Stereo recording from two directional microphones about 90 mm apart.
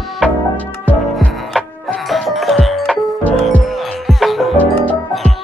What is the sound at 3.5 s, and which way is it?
Music, 5° left (ahead or behind).